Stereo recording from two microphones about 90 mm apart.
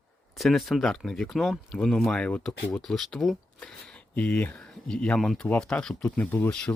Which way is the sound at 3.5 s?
10° left (ahead or behind).